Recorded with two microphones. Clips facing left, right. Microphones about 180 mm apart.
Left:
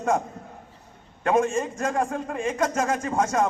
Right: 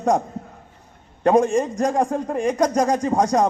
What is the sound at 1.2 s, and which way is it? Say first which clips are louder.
Speech: right 5 dB; 35° right (ahead or behind).